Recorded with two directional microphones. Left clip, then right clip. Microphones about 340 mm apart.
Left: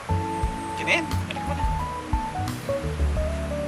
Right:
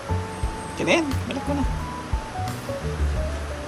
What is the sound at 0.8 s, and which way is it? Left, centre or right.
Music, centre.